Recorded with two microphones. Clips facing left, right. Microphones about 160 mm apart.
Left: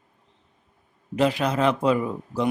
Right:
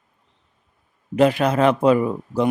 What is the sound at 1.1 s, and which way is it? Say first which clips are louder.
Speech: right 5 dB; 55° right (ahead or behind).